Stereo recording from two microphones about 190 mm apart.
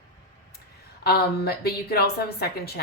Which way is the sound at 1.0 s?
55° left (ahead or behind).